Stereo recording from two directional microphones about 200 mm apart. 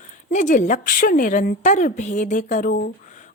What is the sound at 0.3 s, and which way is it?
A woman's voice, 40° left (ahead or behind).